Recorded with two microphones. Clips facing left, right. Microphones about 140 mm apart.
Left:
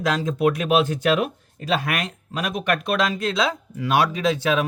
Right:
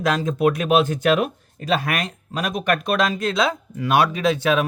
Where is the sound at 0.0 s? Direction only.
50° right (ahead or behind).